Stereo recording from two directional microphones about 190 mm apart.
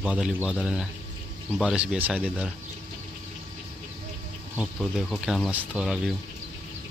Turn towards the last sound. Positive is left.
turn(degrees=0)  # may be behind; listen again after turning